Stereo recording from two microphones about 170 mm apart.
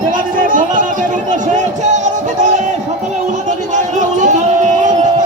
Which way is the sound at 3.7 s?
45° right (ahead or behind).